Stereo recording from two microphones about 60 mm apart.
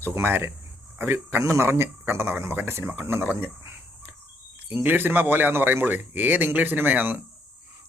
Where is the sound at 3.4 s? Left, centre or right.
Right.